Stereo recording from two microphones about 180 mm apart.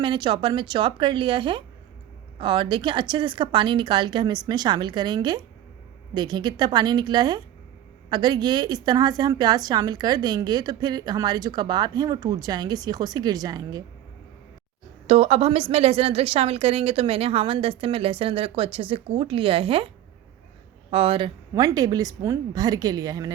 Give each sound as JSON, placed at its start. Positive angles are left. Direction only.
{"t": 0.0, "sound": "a woman's voice", "side_deg": -25}
{"t": 15.0, "sound": "a woman's voice", "side_deg": -35}
{"t": 20.9, "sound": "a woman's voice", "side_deg": -30}
{"t": 21.5, "sound": "a woman's voice", "side_deg": -20}